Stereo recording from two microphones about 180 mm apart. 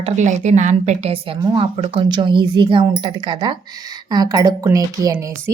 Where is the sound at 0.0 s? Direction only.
40° right (ahead or behind).